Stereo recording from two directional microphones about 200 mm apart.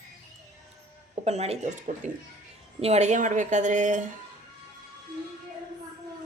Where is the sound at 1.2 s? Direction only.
30° right (ahead or behind).